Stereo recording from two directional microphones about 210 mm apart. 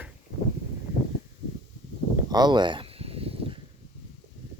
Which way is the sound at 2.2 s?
20° right (ahead or behind).